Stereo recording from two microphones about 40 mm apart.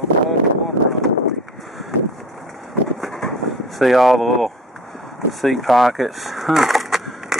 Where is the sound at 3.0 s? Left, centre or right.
Centre.